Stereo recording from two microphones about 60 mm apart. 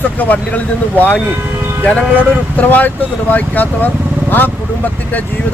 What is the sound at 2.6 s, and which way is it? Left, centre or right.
Speech, left.